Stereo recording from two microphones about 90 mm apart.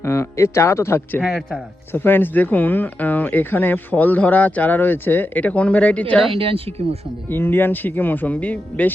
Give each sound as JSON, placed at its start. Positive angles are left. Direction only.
{"t": 0.0, "sound": "speech", "side_deg": 30}
{"t": 6.3, "sound": "speech", "side_deg": -90}
{"t": 7.3, "sound": "speech", "side_deg": 25}